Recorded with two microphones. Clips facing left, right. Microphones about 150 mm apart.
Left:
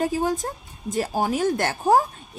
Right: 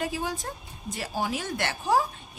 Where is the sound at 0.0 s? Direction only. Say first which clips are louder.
Left 7 dB; 45° left (ahead or behind).